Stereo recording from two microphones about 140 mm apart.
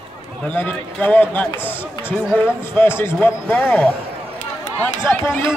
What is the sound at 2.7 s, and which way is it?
A man's voice, 15° left (ahead or behind).